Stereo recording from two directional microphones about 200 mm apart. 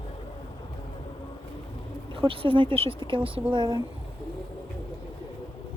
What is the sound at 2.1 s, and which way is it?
Speech, 25° right (ahead or behind).